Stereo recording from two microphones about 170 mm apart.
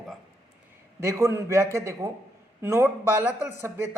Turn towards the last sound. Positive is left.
turn(degrees=-15)  # may be behind; listen again after turning